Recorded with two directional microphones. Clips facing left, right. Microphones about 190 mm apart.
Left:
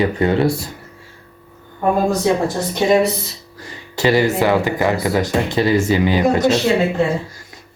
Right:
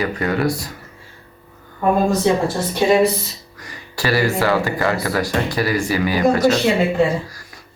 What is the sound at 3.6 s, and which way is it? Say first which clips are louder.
Speech: left 6 dB; 25° left (ahead or behind).